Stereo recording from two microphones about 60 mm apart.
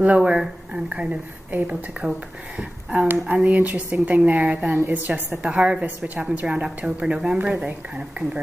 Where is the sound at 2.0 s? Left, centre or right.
Right.